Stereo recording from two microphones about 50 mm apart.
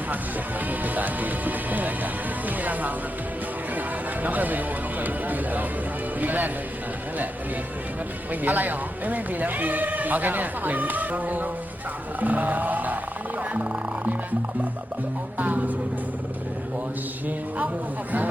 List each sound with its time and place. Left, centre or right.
0.7 s speech: right
8.3 s speech: right
12.2 s a sound: right
13.5 s music: right
15.4 s speech: right